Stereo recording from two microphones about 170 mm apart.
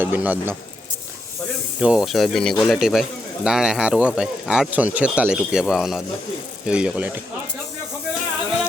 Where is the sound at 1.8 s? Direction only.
5° right (ahead or behind).